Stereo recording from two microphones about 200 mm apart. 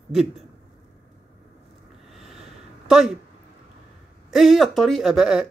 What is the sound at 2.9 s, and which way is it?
Speech, centre (ahead or behind).